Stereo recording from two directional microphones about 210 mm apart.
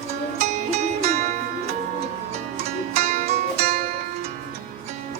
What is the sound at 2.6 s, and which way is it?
Music, 30° right (ahead or behind).